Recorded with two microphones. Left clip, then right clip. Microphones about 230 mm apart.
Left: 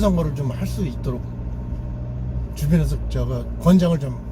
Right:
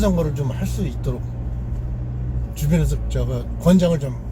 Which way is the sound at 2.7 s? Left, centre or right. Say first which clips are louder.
Right 1 dB; centre.